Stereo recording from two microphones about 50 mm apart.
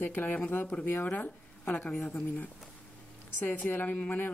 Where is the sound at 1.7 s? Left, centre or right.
Left.